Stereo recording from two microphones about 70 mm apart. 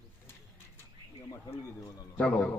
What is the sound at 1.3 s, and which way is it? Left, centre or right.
Speech, left.